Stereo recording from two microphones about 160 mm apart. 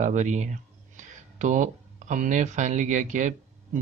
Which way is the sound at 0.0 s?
50° right (ahead or behind).